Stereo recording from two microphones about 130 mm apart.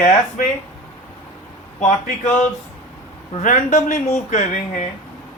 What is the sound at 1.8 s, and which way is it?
Speech, 65° left (ahead or behind).